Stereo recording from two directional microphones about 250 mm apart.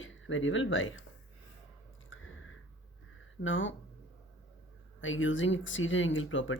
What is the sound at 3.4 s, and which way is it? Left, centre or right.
Speech, left.